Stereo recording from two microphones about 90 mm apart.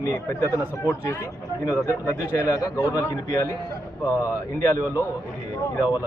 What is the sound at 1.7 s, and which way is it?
A man's voice, 35° left (ahead or behind).